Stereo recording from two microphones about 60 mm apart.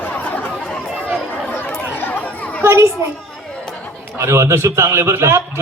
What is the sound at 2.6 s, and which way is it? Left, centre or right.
Children playing, right.